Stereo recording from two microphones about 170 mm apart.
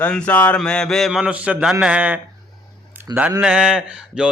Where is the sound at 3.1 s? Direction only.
25° right (ahead or behind).